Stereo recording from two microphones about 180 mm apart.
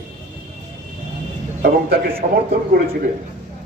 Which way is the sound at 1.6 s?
55° right (ahead or behind).